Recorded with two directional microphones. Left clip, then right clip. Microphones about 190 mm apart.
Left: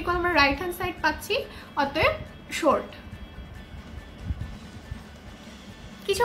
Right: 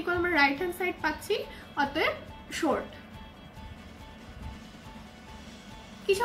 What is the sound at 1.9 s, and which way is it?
Speech, 25° left (ahead or behind).